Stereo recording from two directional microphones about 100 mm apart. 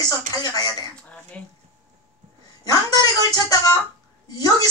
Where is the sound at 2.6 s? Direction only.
40° left (ahead or behind).